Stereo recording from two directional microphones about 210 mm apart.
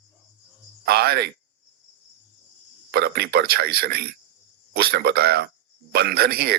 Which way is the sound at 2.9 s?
50° right (ahead or behind).